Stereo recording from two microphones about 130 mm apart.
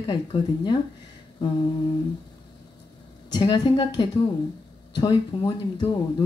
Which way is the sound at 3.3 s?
35° left (ahead or behind).